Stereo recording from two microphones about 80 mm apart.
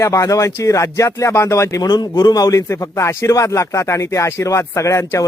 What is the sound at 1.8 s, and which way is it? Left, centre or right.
A man's voice, left.